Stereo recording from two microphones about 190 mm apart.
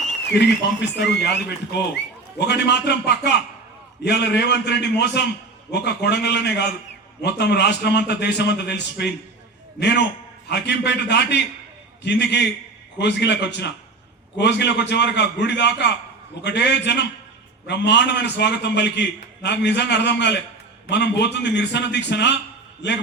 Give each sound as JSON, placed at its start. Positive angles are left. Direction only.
{"t": 0.3, "sound": "a man's voice", "side_deg": 65}
{"t": 4.0, "sound": "a man's voice", "side_deg": 65}